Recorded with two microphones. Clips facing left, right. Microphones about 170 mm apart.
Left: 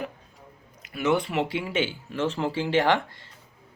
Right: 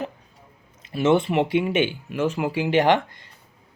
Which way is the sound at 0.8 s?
25° right (ahead or behind).